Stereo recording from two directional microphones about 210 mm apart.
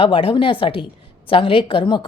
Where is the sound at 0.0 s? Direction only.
25° left (ahead or behind).